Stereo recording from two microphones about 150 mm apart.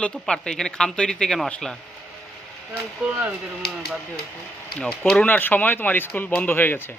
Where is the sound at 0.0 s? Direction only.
5° left (ahead or behind).